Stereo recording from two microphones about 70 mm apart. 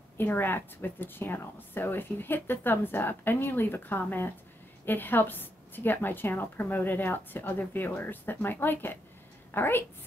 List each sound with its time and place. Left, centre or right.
0.2 s a woman's voice: left